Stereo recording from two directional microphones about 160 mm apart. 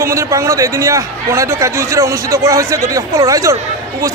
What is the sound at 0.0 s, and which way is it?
A man's voice, 20° right (ahead or behind).